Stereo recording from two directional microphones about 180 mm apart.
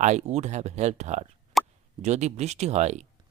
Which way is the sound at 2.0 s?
40° right (ahead or behind).